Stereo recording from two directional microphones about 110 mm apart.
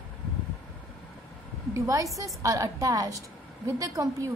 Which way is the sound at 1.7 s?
30° right (ahead or behind).